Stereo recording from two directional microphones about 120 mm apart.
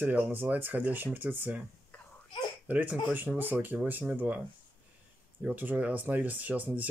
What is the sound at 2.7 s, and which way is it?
Speech, 15° right (ahead or behind).